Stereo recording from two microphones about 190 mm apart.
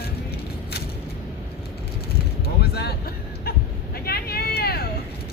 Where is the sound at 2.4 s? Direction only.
55° left (ahead or behind).